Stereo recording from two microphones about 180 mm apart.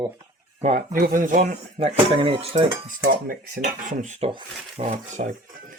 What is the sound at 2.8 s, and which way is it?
Dishes, 50° right (ahead or behind).